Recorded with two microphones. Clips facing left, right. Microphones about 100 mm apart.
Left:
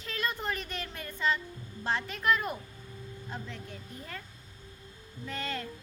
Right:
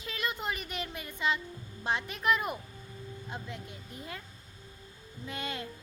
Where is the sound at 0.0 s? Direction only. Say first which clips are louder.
Left 1 dB; 10° right (ahead or behind).